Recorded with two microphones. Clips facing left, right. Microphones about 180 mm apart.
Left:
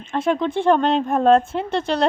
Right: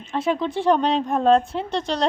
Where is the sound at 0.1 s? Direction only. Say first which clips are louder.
Left 2 dB; centre (ahead or behind).